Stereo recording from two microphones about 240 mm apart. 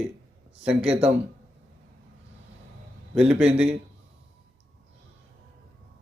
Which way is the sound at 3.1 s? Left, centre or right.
Centre.